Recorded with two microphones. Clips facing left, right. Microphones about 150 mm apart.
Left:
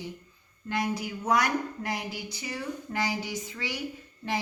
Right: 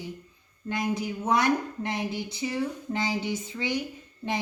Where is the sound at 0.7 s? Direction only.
20° right (ahead or behind).